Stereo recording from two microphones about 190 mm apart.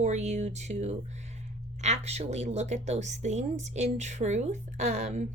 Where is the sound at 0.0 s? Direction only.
35° right (ahead or behind).